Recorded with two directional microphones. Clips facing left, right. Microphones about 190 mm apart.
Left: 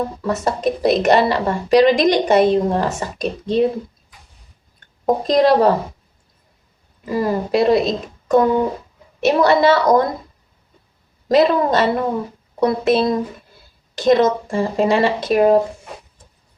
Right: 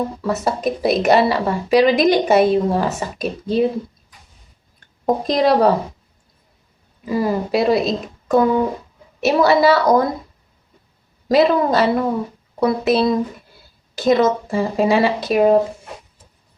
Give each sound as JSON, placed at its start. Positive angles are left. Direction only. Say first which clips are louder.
{"t": 0.2, "sound": "a woman's voice", "louder": "even", "side_deg": -5}
{"t": 5.0, "sound": "a woman's voice", "louder": "left 2 dB", "side_deg": 0}
{"t": 7.0, "sound": "a woman's voice", "louder": "even", "side_deg": 0}
{"t": 11.3, "sound": "a woman's voice", "louder": "even", "side_deg": 0}